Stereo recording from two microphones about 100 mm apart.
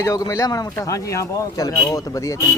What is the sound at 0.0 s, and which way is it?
Speech, 35° left (ahead or behind).